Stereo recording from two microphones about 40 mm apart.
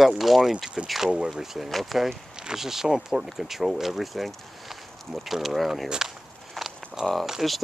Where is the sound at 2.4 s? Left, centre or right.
Centre.